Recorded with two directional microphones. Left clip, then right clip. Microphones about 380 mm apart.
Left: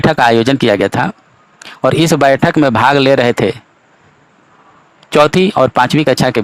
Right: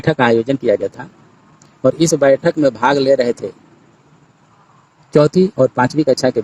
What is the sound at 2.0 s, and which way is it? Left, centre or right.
Speech, left.